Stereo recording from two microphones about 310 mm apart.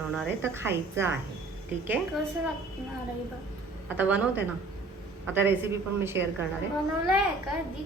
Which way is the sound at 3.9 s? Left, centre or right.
Centre.